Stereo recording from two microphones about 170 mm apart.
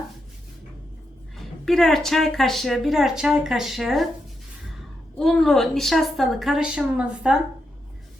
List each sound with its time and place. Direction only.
1.4 s a woman's voice: centre (ahead or behind)
5.2 s a woman's voice: centre (ahead or behind)